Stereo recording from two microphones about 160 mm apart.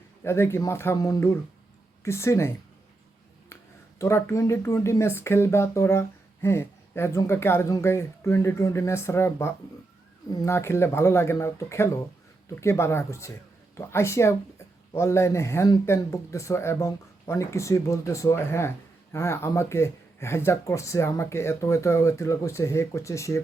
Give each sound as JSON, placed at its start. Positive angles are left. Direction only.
{"t": 0.2, "sound": "speech", "side_deg": 15}
{"t": 3.5, "sound": "speech", "side_deg": 15}